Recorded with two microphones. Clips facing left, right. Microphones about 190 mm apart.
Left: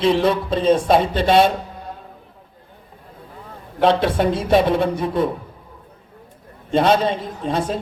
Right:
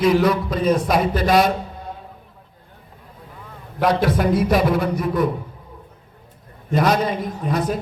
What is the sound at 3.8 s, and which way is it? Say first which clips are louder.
A woman's voice: left 2 dB; 25° left (ahead or behind).